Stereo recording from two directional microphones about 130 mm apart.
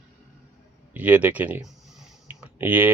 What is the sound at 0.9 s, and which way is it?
Speech, 15° right (ahead or behind).